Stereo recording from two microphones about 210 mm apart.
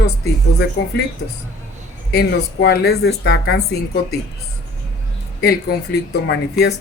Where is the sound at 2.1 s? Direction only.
50° left (ahead or behind).